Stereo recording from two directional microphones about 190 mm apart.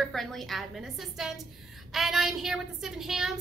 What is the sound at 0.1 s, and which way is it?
Child singing, centre (ahead or behind).